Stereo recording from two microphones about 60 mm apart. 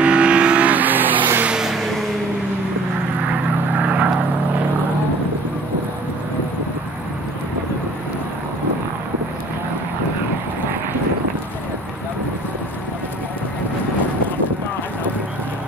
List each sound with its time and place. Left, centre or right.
0.0 s vehicle: centre
1.5 s a sound: centre
3.8 s vehicle: right